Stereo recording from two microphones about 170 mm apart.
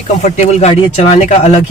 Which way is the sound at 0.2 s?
40° left (ahead or behind).